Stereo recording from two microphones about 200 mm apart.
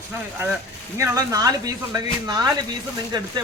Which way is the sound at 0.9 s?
15° right (ahead or behind).